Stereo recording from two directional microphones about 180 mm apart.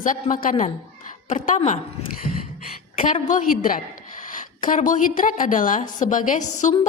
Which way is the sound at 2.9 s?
45° left (ahead or behind).